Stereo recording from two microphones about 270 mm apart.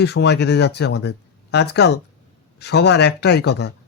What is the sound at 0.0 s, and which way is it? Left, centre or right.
Speech, left.